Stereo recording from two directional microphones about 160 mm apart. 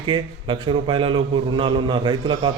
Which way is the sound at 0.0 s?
30° right (ahead or behind).